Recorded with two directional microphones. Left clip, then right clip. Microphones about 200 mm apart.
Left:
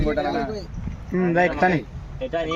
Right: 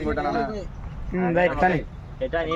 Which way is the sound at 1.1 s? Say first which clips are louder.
Left 1 dB; 45° left (ahead or behind).